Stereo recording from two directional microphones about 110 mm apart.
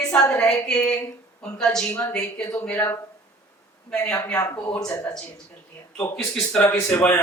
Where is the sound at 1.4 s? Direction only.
5° left (ahead or behind).